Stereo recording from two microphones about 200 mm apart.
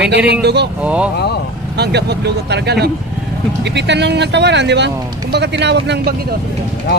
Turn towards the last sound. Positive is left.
turn(degrees=-55)  # may be behind; listen again after turning